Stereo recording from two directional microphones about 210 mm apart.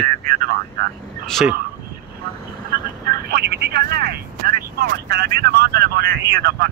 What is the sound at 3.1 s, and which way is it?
Speech, 45° right (ahead or behind).